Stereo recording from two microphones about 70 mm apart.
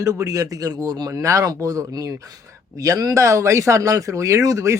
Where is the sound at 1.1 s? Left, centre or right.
Right.